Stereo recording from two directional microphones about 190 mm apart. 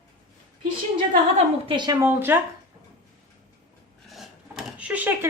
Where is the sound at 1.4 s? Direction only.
25° right (ahead or behind).